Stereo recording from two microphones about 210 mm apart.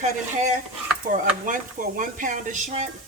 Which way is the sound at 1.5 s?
40° right (ahead or behind).